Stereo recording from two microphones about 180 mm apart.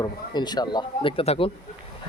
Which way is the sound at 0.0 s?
25° left (ahead or behind).